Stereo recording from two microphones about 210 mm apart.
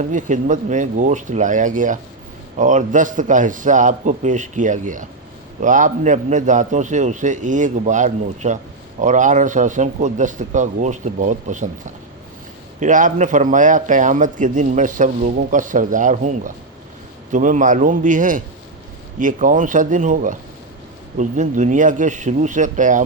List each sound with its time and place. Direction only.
0.0 s a man's voice: 35° right (ahead or behind)
12.8 s a man's voice: 40° right (ahead or behind)